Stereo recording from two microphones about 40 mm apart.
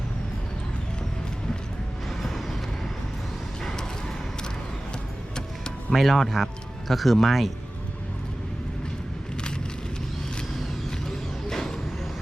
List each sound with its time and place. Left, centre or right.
2.2 s vehicle: centre
3.6 s mechanisms: centre
5.9 s speech: centre
11.4 s vehicle: centre